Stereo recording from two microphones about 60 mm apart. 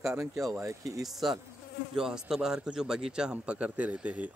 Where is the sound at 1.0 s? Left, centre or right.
Centre.